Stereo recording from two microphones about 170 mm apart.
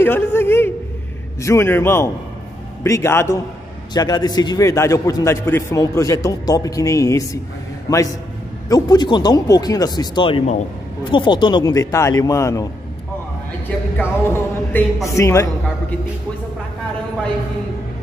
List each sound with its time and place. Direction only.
0.0 s music: 15° left (ahead or behind)
3.9 s a man's voice: 25° left (ahead or behind)
13.9 s music: 15° left (ahead or behind)
15.0 s a man's voice: 20° left (ahead or behind)